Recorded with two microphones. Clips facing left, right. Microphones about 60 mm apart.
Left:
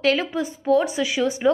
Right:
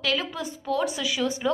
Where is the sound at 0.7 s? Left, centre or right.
Left.